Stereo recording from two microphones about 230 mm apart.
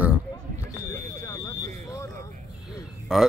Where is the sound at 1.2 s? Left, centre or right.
Centre.